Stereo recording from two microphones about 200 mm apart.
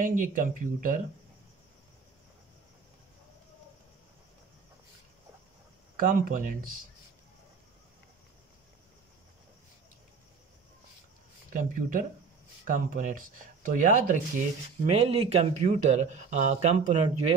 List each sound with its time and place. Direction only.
0.0 s speech: 40° right (ahead or behind)
5.9 s speech: 45° right (ahead or behind)
11.5 s speech: 40° right (ahead or behind)
14.9 s speech: 30° right (ahead or behind)